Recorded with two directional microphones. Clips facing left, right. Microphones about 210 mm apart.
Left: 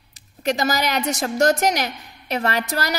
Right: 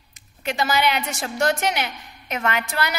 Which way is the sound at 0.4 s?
40° left (ahead or behind).